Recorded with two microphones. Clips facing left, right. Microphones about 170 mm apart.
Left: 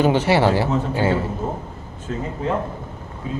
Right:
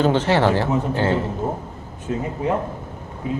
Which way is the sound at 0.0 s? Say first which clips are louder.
Left 1 dB; 10° left (ahead or behind).